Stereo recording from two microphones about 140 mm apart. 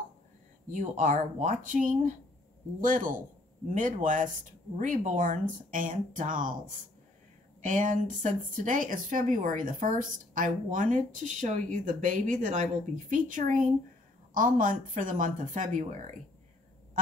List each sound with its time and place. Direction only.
0.7 s speech: 65° right (ahead or behind)